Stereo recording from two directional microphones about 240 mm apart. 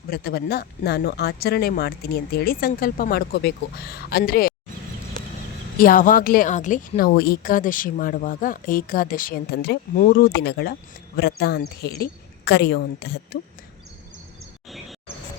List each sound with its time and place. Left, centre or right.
0.1 s a woman's voice: left
5.7 s a woman's voice: left